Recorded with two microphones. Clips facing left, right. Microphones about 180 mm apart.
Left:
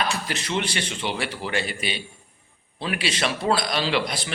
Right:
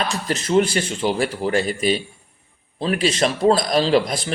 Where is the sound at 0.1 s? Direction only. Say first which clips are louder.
Right 8 dB; 40° right (ahead or behind).